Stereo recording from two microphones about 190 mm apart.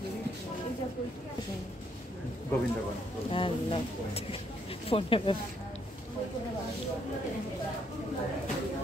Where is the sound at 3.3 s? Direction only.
30° left (ahead or behind).